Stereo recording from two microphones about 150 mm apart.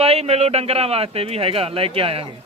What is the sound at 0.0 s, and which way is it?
A man's voice, 45° right (ahead or behind).